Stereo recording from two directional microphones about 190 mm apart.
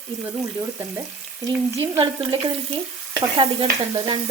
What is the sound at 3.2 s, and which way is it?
Frying, 25° right (ahead or behind).